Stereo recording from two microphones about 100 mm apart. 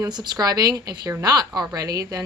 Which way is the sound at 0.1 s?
45° right (ahead or behind).